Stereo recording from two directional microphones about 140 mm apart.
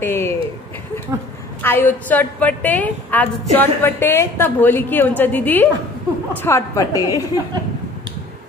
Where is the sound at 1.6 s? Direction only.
15° left (ahead or behind).